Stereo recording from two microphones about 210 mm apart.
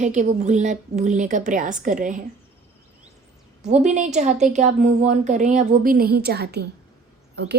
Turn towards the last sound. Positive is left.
turn(degrees=-50)  # may be behind; listen again after turning